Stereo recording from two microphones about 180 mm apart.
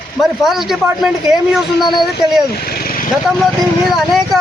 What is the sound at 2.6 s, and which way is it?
Vehicle, 60° left (ahead or behind).